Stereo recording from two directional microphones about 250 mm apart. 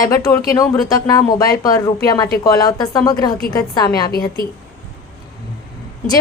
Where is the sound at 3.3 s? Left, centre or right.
Left.